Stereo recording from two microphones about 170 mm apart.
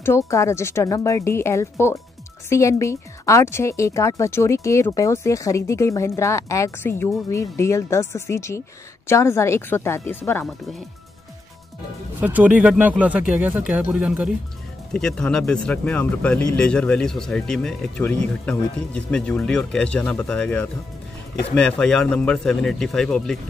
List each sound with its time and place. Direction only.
0.0 s speech: 15° left (ahead or behind)
12.2 s speech: 10° right (ahead or behind)